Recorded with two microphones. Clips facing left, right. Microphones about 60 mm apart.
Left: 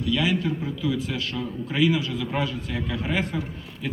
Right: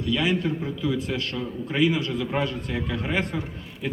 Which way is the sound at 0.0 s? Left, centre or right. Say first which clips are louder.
Even; centre.